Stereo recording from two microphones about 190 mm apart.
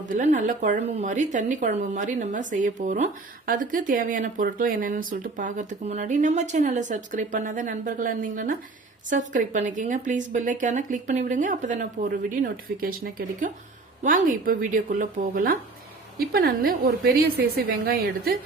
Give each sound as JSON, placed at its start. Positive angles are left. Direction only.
{"t": 0.0, "sound": "a woman's voice", "side_deg": -40}